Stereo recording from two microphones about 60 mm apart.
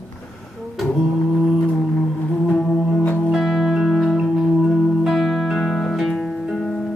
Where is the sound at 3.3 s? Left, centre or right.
Centre.